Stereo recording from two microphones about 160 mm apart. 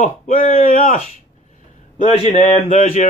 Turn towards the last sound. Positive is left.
turn(degrees=50)  # may be behind; listen again after turning